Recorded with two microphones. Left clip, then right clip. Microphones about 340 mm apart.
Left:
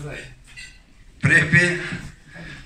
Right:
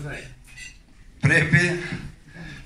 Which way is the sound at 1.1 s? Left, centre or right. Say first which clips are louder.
Left 3 dB; centre.